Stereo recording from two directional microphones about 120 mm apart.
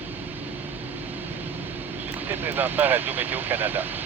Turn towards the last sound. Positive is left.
turn(degrees=-15)  # may be behind; listen again after turning